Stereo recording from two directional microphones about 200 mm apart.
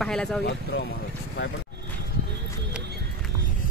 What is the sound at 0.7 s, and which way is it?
Speech, 65° left (ahead or behind).